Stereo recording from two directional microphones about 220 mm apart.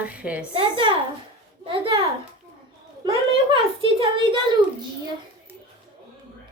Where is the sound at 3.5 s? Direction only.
20° right (ahead or behind).